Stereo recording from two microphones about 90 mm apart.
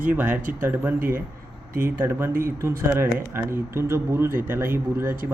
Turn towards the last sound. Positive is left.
turn(degrees=-25)  # may be behind; listen again after turning